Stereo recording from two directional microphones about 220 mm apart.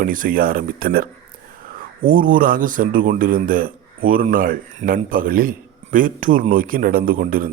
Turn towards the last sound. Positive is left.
turn(degrees=-40)  # may be behind; listen again after turning